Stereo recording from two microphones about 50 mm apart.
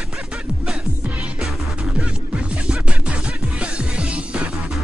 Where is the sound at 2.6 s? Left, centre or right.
Right.